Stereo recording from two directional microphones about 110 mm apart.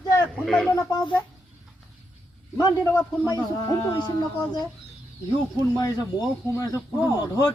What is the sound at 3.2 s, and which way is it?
Speech, 35° left (ahead or behind).